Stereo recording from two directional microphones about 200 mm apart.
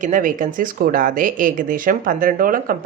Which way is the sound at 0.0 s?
40° right (ahead or behind).